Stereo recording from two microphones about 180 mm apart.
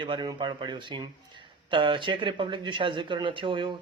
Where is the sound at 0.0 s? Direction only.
25° right (ahead or behind).